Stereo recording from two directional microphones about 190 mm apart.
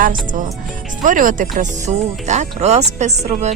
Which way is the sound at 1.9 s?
30° right (ahead or behind).